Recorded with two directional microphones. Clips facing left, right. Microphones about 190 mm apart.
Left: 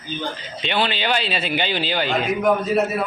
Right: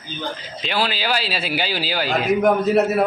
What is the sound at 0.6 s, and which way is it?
Speech, centre (ahead or behind).